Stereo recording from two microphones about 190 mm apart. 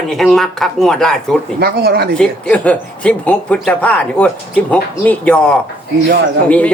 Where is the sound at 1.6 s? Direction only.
55° right (ahead or behind).